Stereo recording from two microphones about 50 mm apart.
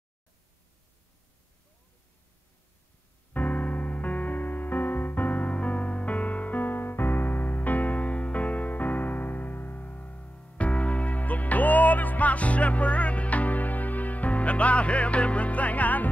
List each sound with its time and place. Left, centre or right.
3.3 s music: left